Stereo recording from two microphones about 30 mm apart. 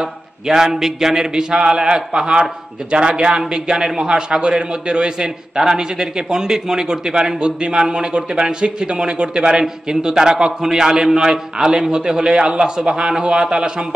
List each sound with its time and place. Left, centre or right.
0.7 s speech: centre
1.6 s a man's voice: right
3.7 s speech: centre
4.0 s a man's voice: right